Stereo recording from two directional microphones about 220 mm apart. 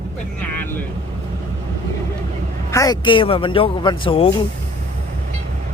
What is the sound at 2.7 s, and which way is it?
A woman's voice, 15° left (ahead or behind).